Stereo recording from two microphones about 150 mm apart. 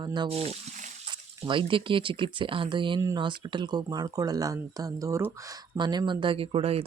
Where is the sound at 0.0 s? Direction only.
30° right (ahead or behind).